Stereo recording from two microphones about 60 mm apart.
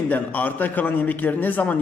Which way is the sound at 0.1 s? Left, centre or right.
Left.